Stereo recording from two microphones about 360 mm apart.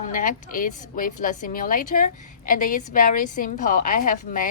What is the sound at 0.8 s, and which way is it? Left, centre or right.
A woman's voice, left.